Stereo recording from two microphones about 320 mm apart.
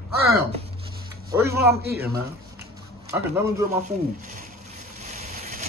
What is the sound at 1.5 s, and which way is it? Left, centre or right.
Speech, right.